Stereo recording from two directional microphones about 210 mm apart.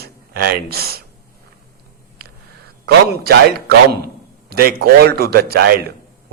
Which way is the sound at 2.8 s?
50° right (ahead or behind).